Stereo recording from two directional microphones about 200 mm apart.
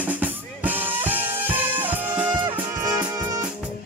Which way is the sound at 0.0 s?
10° right (ahead or behind).